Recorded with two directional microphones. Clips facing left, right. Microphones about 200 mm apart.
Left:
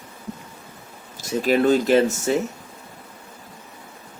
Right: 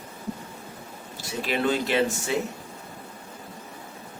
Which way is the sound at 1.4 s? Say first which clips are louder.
Left 7 dB; 45° left (ahead or behind).